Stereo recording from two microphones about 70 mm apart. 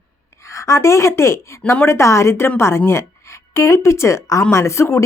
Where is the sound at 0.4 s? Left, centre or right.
Left.